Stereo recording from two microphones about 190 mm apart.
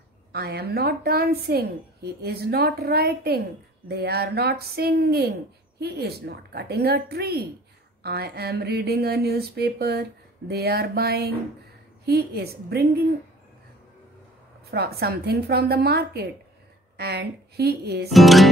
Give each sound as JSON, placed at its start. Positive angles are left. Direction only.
{"t": 0.3, "sound": "speech", "side_deg": -55}
{"t": 14.7, "sound": "speech", "side_deg": -55}
{"t": 18.1, "sound": "music", "side_deg": 0}